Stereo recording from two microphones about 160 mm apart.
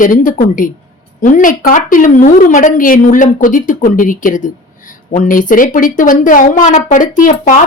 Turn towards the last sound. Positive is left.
turn(degrees=55)  # may be behind; listen again after turning